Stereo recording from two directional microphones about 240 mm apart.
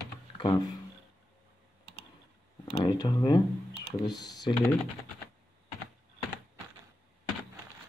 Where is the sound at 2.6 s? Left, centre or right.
Left.